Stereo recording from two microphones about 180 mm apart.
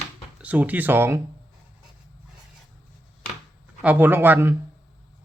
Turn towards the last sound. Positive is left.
turn(degrees=-10)  # may be behind; listen again after turning